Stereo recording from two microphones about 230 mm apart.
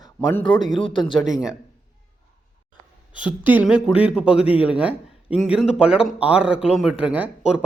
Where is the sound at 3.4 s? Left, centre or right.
Centre.